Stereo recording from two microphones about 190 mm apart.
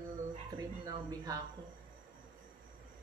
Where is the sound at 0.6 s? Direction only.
20° right (ahead or behind).